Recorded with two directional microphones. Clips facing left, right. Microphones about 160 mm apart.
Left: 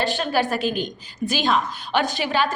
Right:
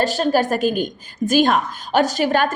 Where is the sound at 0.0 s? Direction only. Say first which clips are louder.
Right 4 dB; 40° right (ahead or behind).